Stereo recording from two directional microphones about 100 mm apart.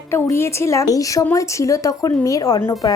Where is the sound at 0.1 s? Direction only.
25° left (ahead or behind).